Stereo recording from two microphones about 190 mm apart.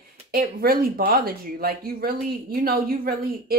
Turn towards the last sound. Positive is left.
turn(degrees=-50)  # may be behind; listen again after turning